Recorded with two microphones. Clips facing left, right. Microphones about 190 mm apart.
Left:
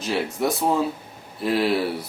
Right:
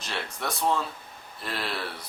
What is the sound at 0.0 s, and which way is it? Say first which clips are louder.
Speech: left 10 dB; 5° left (ahead or behind).